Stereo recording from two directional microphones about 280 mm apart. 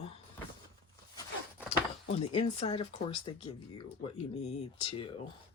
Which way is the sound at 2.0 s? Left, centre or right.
Left.